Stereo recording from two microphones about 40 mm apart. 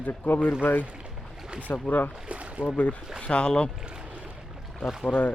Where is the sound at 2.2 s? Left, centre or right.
Right.